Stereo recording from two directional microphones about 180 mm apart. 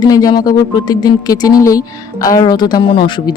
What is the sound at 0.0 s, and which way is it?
Speech, 20° left (ahead or behind).